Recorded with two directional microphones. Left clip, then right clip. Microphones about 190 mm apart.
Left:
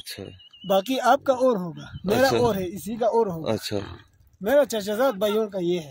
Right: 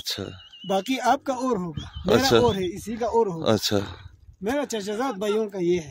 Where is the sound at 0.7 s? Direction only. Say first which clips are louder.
Left 3 dB; 10° left (ahead or behind).